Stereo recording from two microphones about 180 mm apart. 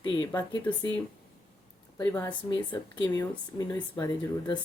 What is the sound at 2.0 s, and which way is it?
Speech, 20° left (ahead or behind).